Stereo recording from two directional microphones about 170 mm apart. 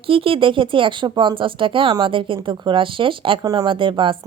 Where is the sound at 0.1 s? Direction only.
30° right (ahead or behind).